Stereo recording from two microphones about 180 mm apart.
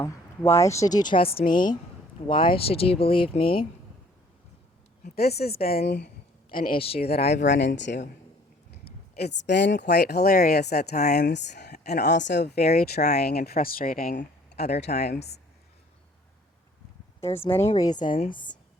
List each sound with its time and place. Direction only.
0.0 s speech: 15° left (ahead or behind); by 1.5 s 30° left (ahead or behind)
1.5 s a woman's voice: 50° left (ahead or behind)
2.2 s speech: 30° left (ahead or behind)
5.1 s speech: 60° left (ahead or behind)
6.5 s speech: 50° left (ahead or behind)
6.7 s speech: 30° left (ahead or behind)
7.4 s a woman's voice: 40° left (ahead or behind)
7.8 s a man's voice: 80° left
8.8 s speech: 65° left (ahead or behind)
17.2 s speech: 15° left (ahead or behind)
18.0 s a woman's voice: 45° left (ahead or behind)
18.3 s speech: 25° left (ahead or behind)